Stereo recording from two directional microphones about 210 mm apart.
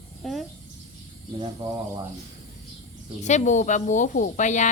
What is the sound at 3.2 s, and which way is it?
A woman's voice, 35° left (ahead or behind).